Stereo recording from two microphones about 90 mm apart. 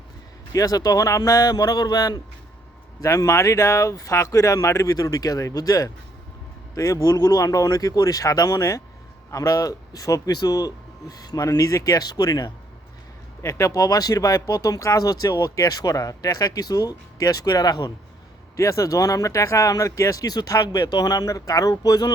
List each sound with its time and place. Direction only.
0.5 s speech: 40° left (ahead or behind)
3.0 s speech: 35° left (ahead or behind)
13.4 s speech: 35° left (ahead or behind)
18.5 s speech: 35° left (ahead or behind)